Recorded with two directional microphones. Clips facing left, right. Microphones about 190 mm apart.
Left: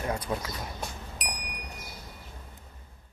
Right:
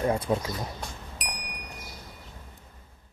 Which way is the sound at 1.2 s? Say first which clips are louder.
Left 1 dB; centre (ahead or behind).